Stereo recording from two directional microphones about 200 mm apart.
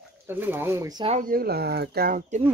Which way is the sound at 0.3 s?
10° right (ahead or behind).